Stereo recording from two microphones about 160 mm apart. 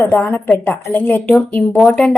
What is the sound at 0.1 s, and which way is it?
A woman's voice, 15° left (ahead or behind).